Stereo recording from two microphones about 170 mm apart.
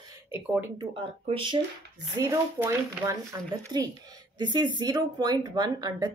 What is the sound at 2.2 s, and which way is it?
Speech, 20° right (ahead or behind).